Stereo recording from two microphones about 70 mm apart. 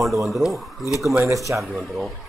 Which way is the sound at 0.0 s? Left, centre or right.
Centre.